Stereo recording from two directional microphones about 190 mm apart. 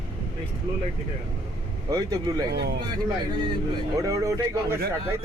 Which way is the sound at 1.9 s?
20° right (ahead or behind).